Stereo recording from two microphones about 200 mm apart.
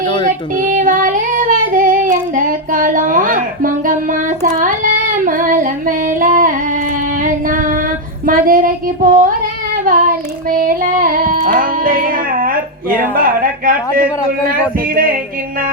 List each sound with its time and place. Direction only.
0.3 s child singing: 40° right (ahead or behind)
7.2 s female singing: 40° right (ahead or behind)
8.3 s child singing: 45° right (ahead or behind)
10.6 s music: 45° right (ahead or behind)